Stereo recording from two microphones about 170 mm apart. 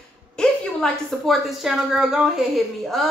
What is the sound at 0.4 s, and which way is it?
A woman's voice, centre (ahead or behind).